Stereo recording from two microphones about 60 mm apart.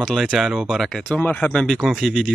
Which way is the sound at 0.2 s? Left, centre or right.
Centre.